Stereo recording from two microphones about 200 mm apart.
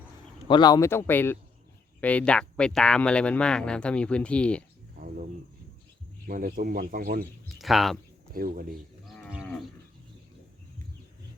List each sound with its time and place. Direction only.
0.4 s speech: 20° left (ahead or behind); by 4.6 s 5° left (ahead or behind)
4.9 s a sound: 45° right (ahead or behind)
6.2 s speech: 45° right (ahead or behind)
7.6 s speech: centre (ahead or behind)
8.3 s speech: 45° right (ahead or behind)